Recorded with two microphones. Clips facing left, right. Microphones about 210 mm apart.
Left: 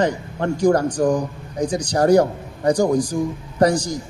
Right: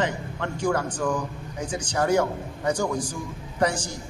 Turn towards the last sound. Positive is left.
turn(degrees=40)  # may be behind; listen again after turning